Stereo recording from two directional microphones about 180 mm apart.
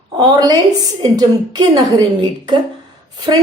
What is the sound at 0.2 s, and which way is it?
A woman's voice, 20° right (ahead or behind).